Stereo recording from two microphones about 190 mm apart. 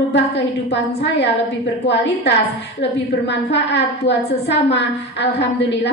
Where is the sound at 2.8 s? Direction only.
65° left (ahead or behind).